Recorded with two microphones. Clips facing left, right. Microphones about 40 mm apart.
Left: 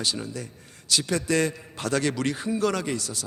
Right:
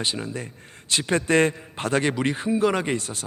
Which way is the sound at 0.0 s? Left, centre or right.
Right.